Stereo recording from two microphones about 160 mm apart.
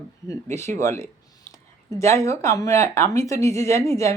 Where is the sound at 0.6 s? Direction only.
15° left (ahead or behind).